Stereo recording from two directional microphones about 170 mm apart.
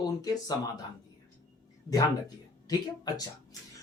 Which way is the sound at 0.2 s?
25° left (ahead or behind).